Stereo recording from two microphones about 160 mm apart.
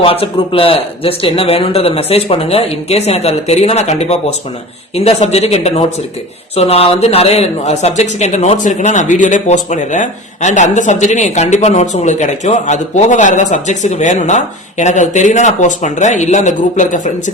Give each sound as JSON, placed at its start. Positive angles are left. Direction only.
{"t": 0.0, "sound": "speech", "side_deg": 35}